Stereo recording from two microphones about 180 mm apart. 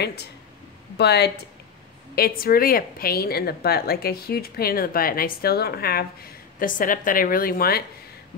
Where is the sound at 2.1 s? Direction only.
55° left (ahead or behind).